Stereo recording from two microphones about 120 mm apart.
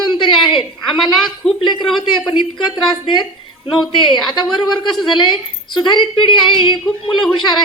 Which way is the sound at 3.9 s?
40° left (ahead or behind).